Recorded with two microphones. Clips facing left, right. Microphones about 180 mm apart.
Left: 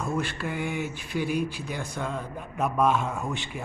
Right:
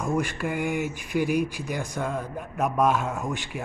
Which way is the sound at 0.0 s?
15° right (ahead or behind).